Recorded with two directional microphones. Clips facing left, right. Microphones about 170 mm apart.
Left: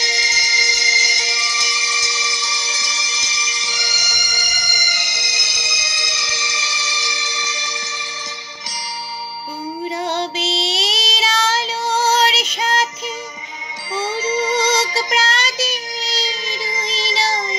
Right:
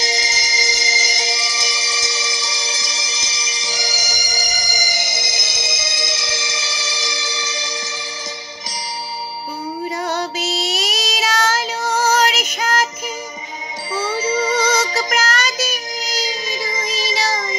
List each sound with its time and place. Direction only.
0.0 s music: 40° right (ahead or behind)
10.0 s child singing: 25° left (ahead or behind)
14.4 s music: 25° left (ahead or behind)
15.0 s child singing: 45° right (ahead or behind)
15.2 s child singing: 25° left (ahead or behind)
16.9 s music: 25° left (ahead or behind)